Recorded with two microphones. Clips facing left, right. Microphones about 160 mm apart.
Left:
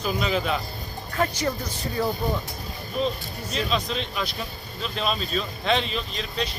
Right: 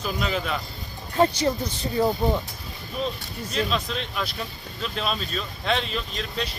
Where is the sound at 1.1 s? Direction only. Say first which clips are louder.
Right 5 dB; 25° right (ahead or behind).